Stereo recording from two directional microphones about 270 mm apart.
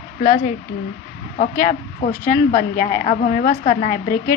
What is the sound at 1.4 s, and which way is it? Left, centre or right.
A woman's voice, left.